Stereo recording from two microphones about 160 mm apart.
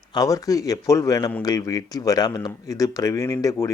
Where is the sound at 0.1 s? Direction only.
20° left (ahead or behind).